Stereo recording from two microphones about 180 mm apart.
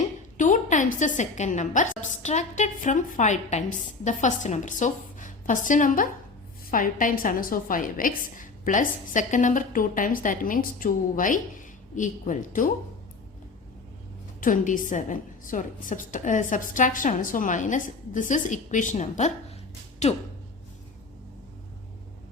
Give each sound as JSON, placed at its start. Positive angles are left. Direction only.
{"t": 0.0, "sound": "a woman's voice", "side_deg": 45}
{"t": 14.4, "sound": "a woman's voice", "side_deg": 45}